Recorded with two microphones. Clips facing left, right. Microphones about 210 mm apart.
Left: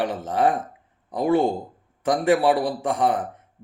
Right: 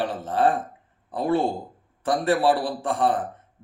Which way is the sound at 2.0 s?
15° left (ahead or behind).